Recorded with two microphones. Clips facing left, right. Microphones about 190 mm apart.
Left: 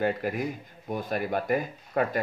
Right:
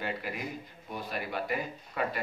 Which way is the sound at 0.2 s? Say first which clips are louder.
Left 7 dB; 45° left (ahead or behind).